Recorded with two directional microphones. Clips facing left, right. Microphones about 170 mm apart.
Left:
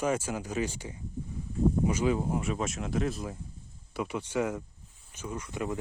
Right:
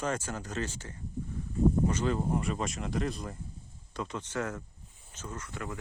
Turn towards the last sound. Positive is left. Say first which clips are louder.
# left 6 dB
turn(degrees=15)  # may be behind; listen again after turning